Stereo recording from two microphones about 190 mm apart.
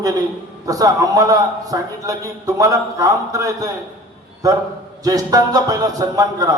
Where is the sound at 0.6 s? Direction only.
20° right (ahead or behind).